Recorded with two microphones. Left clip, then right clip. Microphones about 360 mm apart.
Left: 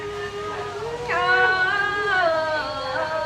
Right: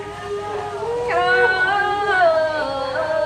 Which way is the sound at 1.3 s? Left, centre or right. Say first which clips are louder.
Right 1 dB; centre.